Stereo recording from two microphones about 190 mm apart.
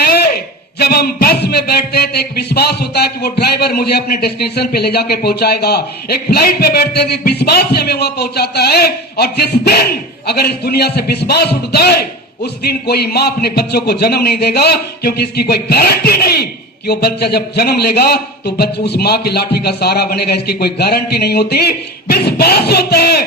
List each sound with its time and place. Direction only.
0.8 s a man's voice: 55° left (ahead or behind)